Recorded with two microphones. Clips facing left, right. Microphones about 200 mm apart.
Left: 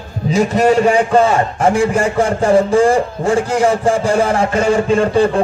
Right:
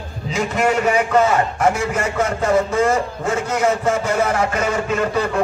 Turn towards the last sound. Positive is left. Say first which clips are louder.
# left 7 dB
turn(degrees=30)  # may be behind; listen again after turning